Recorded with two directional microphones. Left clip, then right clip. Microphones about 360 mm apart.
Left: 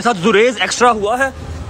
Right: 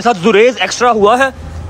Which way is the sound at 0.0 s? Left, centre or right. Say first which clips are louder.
Right 3 dB; centre.